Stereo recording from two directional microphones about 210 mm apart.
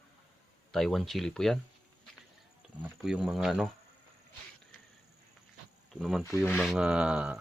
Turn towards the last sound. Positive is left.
turn(degrees=-5)  # may be behind; listen again after turning